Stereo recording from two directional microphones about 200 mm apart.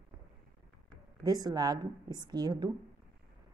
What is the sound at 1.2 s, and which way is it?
A woman's voice, 20° right (ahead or behind).